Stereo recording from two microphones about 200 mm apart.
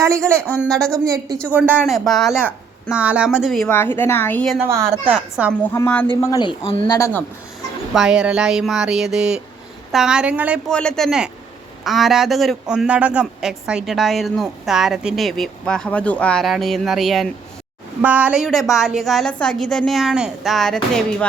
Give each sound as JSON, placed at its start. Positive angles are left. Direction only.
{"t": 0.0, "sound": "a woman's voice", "side_deg": -15}
{"t": 1.7, "sound": "a man's voice", "side_deg": 0}
{"t": 3.8, "sound": "a woman's voice", "side_deg": 10}
{"t": 4.6, "sound": "a man's voice", "side_deg": -10}
{"t": 5.6, "sound": "a woman's voice", "side_deg": 10}
{"t": 7.9, "sound": "a man's voice", "side_deg": -5}
{"t": 10.7, "sound": "a man's voice", "side_deg": 5}